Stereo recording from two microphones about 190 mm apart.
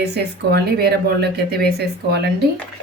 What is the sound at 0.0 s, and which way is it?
A woman's voice, 60° right (ahead or behind).